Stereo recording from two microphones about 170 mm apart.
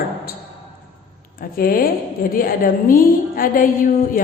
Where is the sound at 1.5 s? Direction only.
60° left (ahead or behind).